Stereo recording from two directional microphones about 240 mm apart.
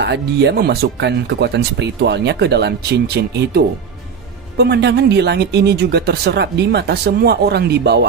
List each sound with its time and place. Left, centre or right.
0.0 s speech: right